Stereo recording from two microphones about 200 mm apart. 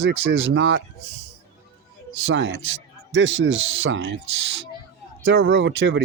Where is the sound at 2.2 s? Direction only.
75° right (ahead or behind).